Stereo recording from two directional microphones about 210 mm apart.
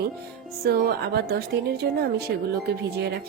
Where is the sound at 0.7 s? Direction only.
50° right (ahead or behind).